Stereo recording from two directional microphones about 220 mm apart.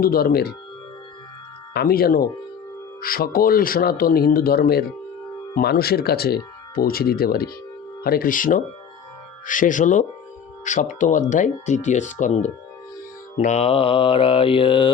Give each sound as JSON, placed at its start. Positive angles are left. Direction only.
{"t": 0.0, "sound": "speech", "side_deg": 40}
{"t": 1.7, "sound": "speech", "side_deg": 45}
{"t": 13.3, "sound": "mantra", "side_deg": 30}